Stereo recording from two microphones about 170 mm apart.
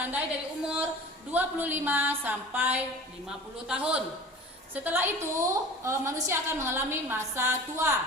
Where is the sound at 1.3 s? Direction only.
10° right (ahead or behind).